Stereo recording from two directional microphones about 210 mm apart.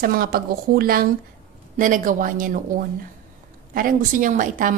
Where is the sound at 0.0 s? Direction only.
45° right (ahead or behind).